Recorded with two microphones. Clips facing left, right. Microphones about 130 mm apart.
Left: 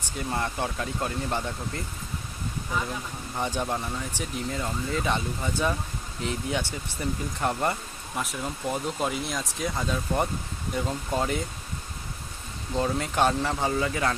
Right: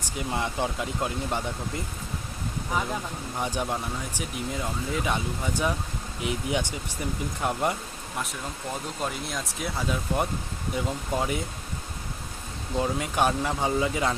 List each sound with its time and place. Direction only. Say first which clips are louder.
0.2 s speech: right 1 dB; 15° right (ahead or behind)
3.3 s speech: left 1 dB; 10° right (ahead or behind)
9.0 s speech: left 2 dB; centre (ahead or behind)
12.7 s speech: even; 5° right (ahead or behind)